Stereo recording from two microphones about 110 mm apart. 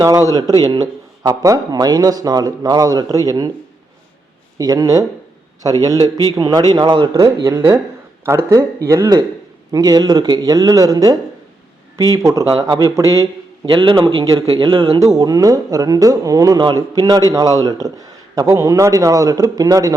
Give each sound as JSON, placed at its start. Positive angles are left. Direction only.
{"t": 0.0, "sound": "speech", "side_deg": -30}
{"t": 4.5, "sound": "speech", "side_deg": -35}
{"t": 7.1, "sound": "speech", "side_deg": -35}
{"t": 7.5, "sound": "speech", "side_deg": -20}
{"t": 8.4, "sound": "speech", "side_deg": -30}
{"t": 13.7, "sound": "speech", "side_deg": -50}
{"t": 14.9, "sound": "speech", "side_deg": -30}